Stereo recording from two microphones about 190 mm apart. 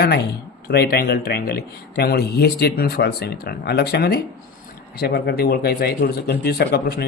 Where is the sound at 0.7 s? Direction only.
55° left (ahead or behind).